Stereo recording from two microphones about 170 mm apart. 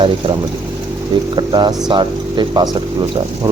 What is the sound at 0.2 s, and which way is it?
Speech, 30° right (ahead or behind).